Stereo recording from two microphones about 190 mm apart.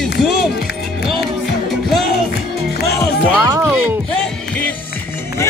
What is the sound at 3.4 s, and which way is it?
Music, 15° right (ahead or behind).